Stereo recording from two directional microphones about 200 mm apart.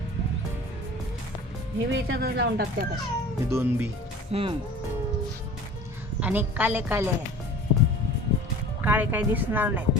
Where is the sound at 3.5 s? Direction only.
10° right (ahead or behind).